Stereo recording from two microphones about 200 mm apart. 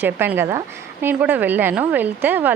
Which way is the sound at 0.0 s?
10° right (ahead or behind).